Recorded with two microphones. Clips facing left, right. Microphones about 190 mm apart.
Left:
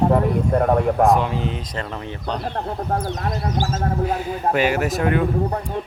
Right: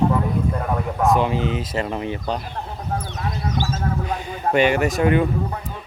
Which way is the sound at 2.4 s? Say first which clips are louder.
Left 6 dB; 60° left (ahead or behind).